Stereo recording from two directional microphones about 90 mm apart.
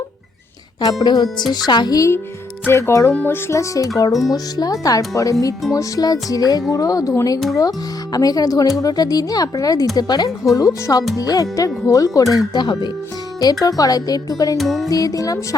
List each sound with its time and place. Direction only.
0.8 s speech: 45° left (ahead or behind)
2.0 s speech: 30° left (ahead or behind)
14.6 s music: centre (ahead or behind)
14.8 s speech: 40° left (ahead or behind)